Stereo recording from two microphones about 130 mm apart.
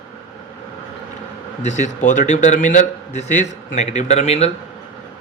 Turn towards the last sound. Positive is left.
turn(degrees=60)  # may be behind; listen again after turning